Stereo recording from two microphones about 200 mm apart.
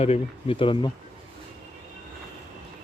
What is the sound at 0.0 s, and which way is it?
Speech, 30° left (ahead or behind).